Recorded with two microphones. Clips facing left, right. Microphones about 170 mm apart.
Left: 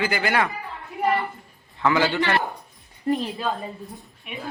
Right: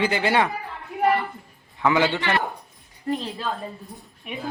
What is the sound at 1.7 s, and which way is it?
Speech, 15° right (ahead or behind).